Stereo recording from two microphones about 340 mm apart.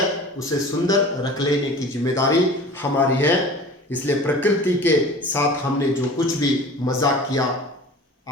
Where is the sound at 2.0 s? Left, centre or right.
Centre.